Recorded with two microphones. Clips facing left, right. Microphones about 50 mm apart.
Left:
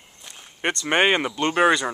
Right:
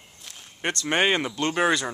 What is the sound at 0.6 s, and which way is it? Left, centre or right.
Speech, left.